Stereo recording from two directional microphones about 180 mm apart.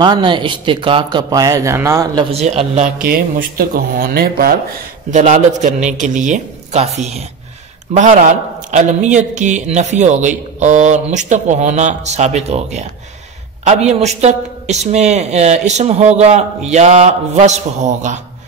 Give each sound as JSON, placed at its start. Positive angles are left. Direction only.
{"t": 0.0, "sound": "a man's voice", "side_deg": -25}
{"t": 2.3, "sound": "a man's voice", "side_deg": -35}
{"t": 3.1, "sound": "speech", "side_deg": -55}
{"t": 5.1, "sound": "a man's voice", "side_deg": -40}